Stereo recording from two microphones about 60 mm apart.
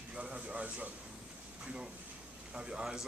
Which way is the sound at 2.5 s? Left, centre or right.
Centre.